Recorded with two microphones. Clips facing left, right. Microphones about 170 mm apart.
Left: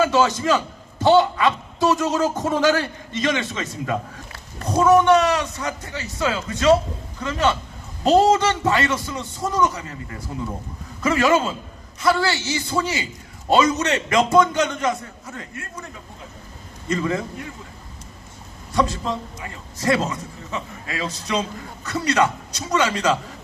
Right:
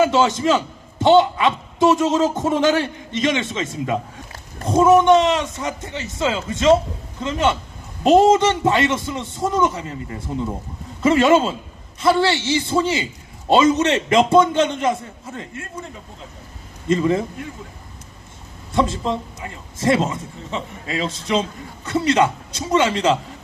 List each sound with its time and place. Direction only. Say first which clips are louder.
0.0 s a man's voice: right 2 dB; 20° right (ahead or behind)
16.9 s a man's voice: right 5 dB; 25° right (ahead or behind)
18.7 s a man's voice: right 2 dB; 25° right (ahead or behind)